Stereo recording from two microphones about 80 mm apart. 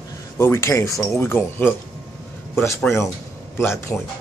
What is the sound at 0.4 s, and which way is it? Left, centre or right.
Speech, left.